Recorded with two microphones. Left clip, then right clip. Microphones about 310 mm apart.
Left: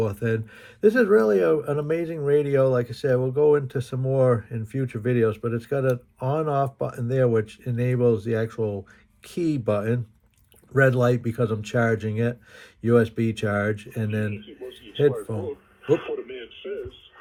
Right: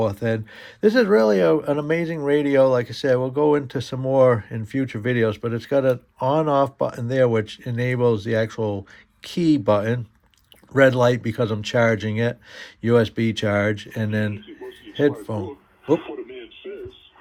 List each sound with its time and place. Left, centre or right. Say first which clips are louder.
0.0 s speech: right 3 dB; right